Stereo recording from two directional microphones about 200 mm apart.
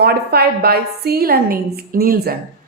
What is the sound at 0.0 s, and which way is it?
A woman's voice, 50° right (ahead or behind).